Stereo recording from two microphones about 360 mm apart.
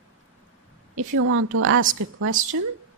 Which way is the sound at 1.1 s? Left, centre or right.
Right.